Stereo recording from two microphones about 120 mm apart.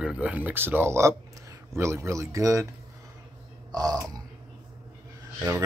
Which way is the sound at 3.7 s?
30° right (ahead or behind).